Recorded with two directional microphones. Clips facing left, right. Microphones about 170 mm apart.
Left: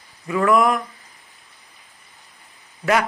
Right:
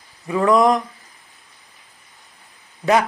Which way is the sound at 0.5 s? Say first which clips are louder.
Right 3 dB; 35° right (ahead or behind).